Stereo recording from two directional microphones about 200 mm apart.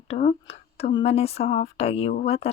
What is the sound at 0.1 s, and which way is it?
Speech, 30° left (ahead or behind).